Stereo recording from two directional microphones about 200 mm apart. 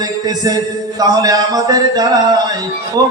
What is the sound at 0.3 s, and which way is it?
Speech, 20° right (ahead or behind).